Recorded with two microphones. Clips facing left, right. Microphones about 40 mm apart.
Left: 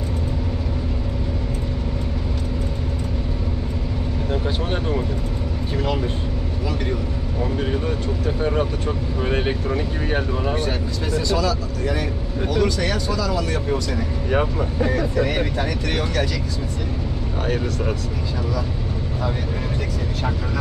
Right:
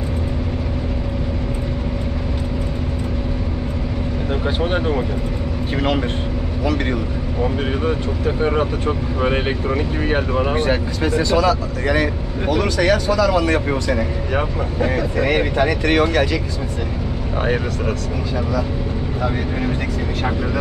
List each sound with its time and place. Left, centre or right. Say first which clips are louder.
4.3 s speech: right 4 dB; right
5.8 s a man's voice: right 4 dB; right
7.4 s speech: right 3 dB; right
10.6 s speech: right 6 dB; right
15.1 s speech: right 4 dB; right